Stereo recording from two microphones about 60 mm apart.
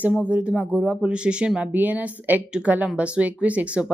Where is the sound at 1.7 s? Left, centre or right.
Right.